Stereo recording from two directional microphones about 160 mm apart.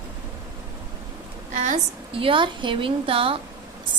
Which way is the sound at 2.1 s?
35° right (ahead or behind).